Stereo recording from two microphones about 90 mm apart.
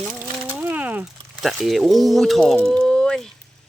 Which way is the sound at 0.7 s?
20° right (ahead or behind).